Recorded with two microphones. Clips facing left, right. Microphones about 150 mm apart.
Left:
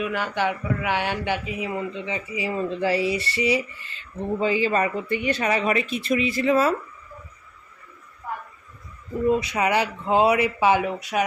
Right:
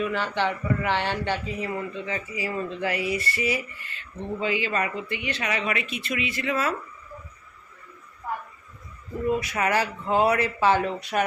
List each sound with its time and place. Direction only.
0.0 s speech: 10° left (ahead or behind); by 6.7 s 30° left (ahead or behind)
9.2 s speech: 25° left (ahead or behind); by 11.3 s 5° left (ahead or behind)